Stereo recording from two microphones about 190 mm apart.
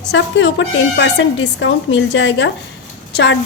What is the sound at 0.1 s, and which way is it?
A woman's voice, 70° left (ahead or behind).